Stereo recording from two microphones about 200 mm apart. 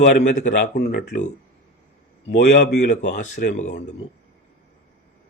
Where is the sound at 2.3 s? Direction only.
55° left (ahead or behind).